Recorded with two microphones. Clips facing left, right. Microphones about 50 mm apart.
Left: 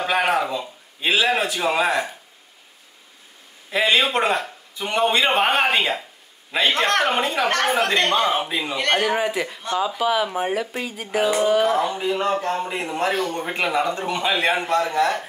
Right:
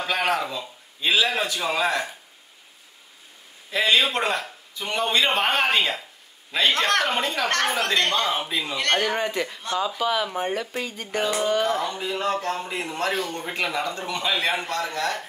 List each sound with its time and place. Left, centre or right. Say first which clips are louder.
0.0 s a man's voice: left 4 dB; centre
3.7 s speech: left 2 dB; centre